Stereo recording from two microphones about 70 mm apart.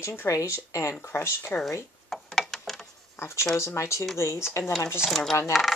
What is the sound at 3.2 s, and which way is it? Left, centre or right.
Speech, left.